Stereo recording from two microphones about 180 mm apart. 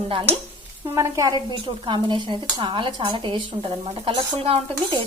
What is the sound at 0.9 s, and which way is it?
Speech, 15° right (ahead or behind).